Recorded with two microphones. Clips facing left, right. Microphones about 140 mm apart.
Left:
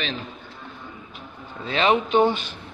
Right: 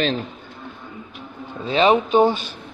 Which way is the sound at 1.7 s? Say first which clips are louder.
Right 4 dB; 20° right (ahead or behind).